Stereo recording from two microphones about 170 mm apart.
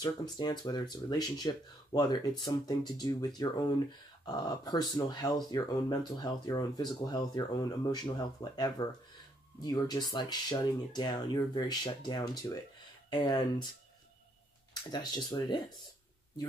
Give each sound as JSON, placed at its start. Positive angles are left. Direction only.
{"t": 0.0, "sound": "speech", "side_deg": 25}
{"t": 4.3, "sound": "speech", "side_deg": 25}
{"t": 14.7, "sound": "speech", "side_deg": 25}